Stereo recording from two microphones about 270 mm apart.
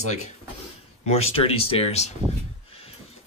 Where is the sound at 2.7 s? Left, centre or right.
Left.